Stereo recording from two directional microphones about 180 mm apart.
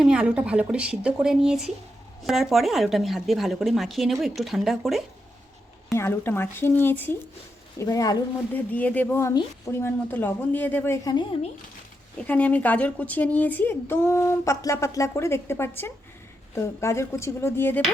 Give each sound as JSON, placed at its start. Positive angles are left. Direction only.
{"t": 0.0, "sound": "speech", "side_deg": -5}
{"t": 5.9, "sound": "a woman's voice", "side_deg": 15}
{"t": 8.5, "sound": "speech", "side_deg": 10}
{"t": 12.3, "sound": "speech", "side_deg": 10}